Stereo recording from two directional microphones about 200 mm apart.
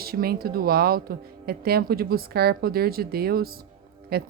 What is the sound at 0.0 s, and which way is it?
A woman's voice, 50° right (ahead or behind).